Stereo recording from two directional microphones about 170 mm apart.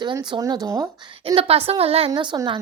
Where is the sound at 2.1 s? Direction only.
25° right (ahead or behind).